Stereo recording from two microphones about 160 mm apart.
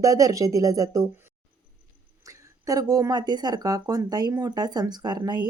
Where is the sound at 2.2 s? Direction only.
20° right (ahead or behind).